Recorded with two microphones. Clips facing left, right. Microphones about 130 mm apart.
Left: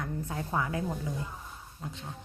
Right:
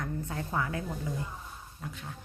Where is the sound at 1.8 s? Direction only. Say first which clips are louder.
Left 1 dB; 25° left (ahead or behind).